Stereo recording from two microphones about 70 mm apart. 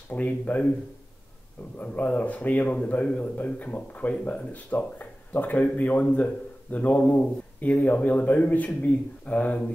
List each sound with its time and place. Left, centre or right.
0.1 s a man's voice: left
1.8 s a man's voice: left